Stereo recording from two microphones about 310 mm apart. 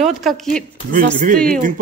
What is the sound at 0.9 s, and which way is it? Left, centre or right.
Speech, right.